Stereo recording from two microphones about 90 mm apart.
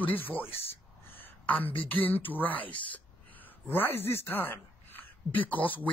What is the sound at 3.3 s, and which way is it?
Speech, 20° left (ahead or behind).